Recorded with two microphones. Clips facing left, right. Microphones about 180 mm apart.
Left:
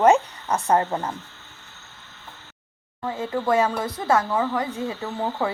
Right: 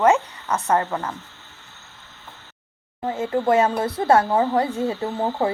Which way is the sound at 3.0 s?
30° right (ahead or behind).